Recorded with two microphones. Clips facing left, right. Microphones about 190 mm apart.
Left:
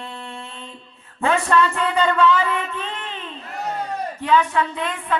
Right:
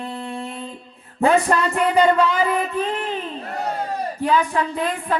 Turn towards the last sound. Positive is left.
turn(degrees=-35)  # may be behind; listen again after turning